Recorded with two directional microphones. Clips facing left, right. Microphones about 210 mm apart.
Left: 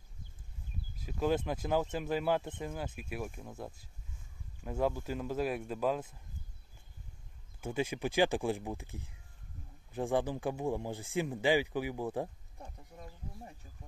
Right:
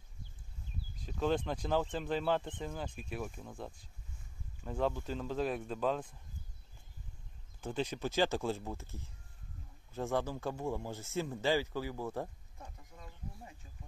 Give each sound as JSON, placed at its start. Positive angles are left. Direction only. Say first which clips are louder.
{"t": 0.9, "sound": "speech", "louder": "left 1 dB", "side_deg": 5}
{"t": 7.6, "sound": "speech", "louder": "left 2 dB", "side_deg": 10}